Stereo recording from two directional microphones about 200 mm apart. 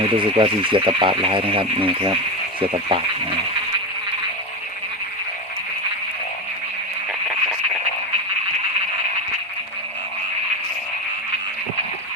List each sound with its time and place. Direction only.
0.2 s speech: 25° right (ahead or behind)